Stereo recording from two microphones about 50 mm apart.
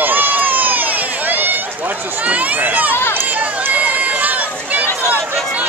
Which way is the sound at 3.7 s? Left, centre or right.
Right.